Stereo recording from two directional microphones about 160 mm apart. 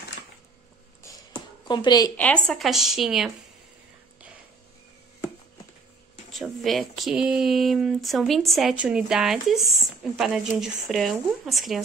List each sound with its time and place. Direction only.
1.0 s a sound: 25° left (ahead or behind)
2.1 s speech: 5° left (ahead or behind)
6.3 s speech: centre (ahead or behind)